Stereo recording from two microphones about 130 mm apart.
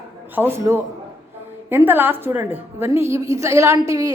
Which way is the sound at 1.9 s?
15° right (ahead or behind).